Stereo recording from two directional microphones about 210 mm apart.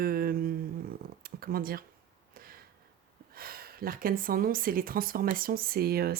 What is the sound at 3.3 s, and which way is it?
Speech, 45° right (ahead or behind).